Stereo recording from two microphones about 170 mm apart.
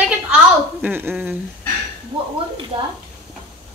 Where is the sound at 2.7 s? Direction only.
30° right (ahead or behind).